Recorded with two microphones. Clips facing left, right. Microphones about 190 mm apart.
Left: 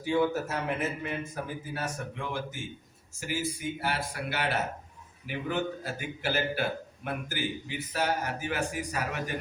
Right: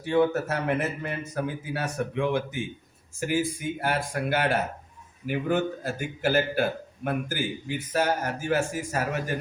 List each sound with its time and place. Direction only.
0.0 s a man's voice: 65° right (ahead or behind)
3.2 s a man's voice: 50° right (ahead or behind)